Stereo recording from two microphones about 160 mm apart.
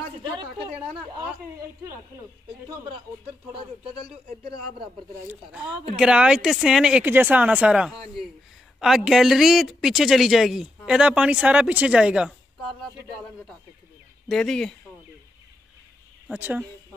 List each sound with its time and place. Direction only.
0.2 s a sound: 30° right (ahead or behind)
5.3 s speech: 5° right (ahead or behind)
14.3 s speech: 5° left (ahead or behind)
16.3 s speech: 10° right (ahead or behind)